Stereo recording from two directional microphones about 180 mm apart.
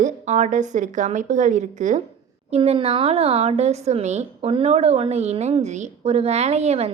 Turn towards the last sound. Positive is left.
turn(degrees=-35)  # may be behind; listen again after turning